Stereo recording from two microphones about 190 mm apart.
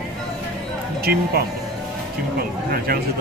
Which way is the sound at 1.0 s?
55° right (ahead or behind).